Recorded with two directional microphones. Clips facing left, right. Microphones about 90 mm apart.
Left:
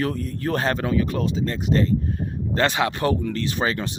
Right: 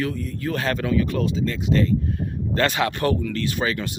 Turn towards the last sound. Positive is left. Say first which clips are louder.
# left 1 dB
turn(degrees=30)  # may be behind; listen again after turning